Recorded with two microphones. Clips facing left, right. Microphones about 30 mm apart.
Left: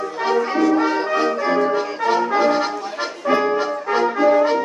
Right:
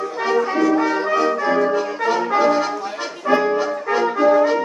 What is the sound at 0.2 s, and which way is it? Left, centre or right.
Brass instrument, centre.